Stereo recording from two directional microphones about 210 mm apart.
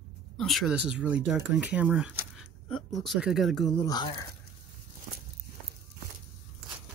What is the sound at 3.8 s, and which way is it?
Speech, 20° left (ahead or behind).